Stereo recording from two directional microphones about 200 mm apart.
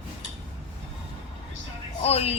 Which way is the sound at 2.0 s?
30° left (ahead or behind).